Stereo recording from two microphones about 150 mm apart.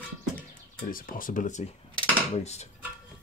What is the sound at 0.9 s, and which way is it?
Speech, 70° left (ahead or behind).